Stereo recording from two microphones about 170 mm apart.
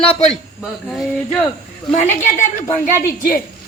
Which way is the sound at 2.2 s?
50° left (ahead or behind).